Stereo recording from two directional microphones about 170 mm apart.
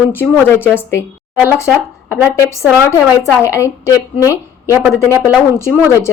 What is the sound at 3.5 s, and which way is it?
Speech, 15° left (ahead or behind).